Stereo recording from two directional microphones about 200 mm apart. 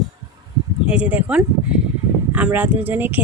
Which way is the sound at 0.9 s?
5° right (ahead or behind).